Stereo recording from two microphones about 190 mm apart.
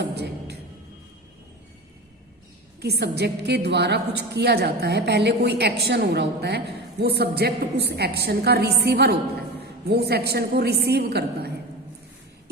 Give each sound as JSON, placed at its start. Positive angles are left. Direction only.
{"t": 0.0, "sound": "a woman's voice", "side_deg": -60}
{"t": 2.8, "sound": "a woman's voice", "side_deg": -60}